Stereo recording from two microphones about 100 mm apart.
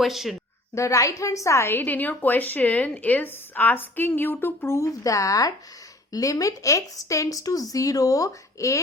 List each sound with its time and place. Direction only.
0.0 s a woman's voice: centre (ahead or behind)
0.8 s a woman's voice: 35° left (ahead or behind)